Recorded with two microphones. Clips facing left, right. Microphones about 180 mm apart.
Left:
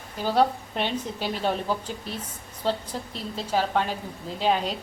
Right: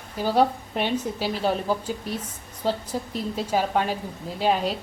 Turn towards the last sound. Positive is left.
turn(degrees=-5)  # may be behind; listen again after turning